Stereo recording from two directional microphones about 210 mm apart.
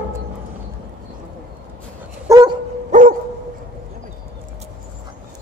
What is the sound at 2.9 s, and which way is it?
Dog, 40° right (ahead or behind).